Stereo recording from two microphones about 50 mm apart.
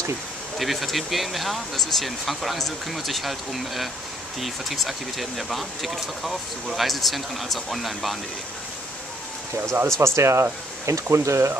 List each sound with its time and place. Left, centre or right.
0.6 s speech: centre
9.9 s speech: right